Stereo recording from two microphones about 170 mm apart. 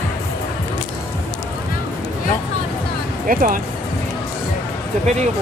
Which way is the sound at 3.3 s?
55° right (ahead or behind).